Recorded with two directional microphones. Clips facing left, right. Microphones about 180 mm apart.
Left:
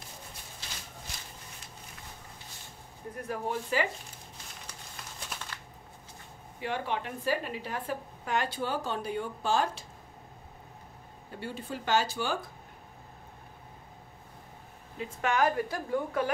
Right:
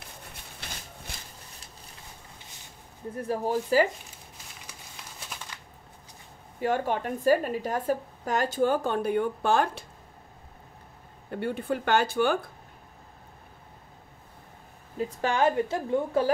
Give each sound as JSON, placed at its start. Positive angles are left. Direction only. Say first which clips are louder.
{"t": 0.0, "sound": "a sound", "louder": "right 1 dB", "side_deg": -60}
{"t": 3.2, "sound": "speech", "louder": "right 6 dB", "side_deg": -35}
{"t": 5.5, "sound": "shuffling cards", "louder": "left 1 dB", "side_deg": -15}
{"t": 6.6, "sound": "a woman's voice", "louder": "right 6 dB", "side_deg": -45}
{"t": 11.2, "sound": "speech", "louder": "right 9 dB", "side_deg": -55}
{"t": 15.0, "sound": "a woman's voice", "louder": "right 2 dB", "side_deg": -35}